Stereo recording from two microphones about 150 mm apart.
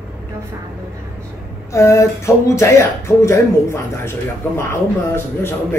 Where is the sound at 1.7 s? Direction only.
20° left (ahead or behind).